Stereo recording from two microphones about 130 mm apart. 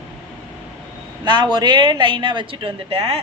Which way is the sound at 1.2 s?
35° right (ahead or behind).